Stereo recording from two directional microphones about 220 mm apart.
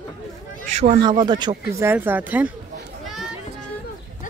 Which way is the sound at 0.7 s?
30° right (ahead or behind).